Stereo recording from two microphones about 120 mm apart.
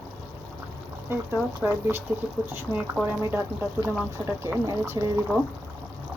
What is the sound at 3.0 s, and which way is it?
Speech, 20° right (ahead or behind).